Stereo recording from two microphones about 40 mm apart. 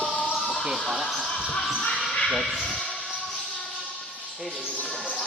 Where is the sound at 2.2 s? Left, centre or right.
Centre.